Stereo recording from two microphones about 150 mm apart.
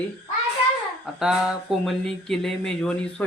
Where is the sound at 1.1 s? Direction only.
5° right (ahead or behind).